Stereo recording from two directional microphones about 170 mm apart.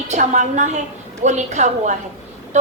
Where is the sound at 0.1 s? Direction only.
45° right (ahead or behind).